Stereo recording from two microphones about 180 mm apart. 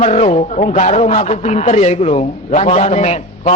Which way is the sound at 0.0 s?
35° left (ahead or behind).